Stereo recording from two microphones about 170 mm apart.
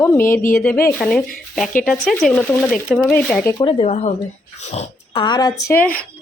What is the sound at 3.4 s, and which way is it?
Speech, 25° left (ahead or behind).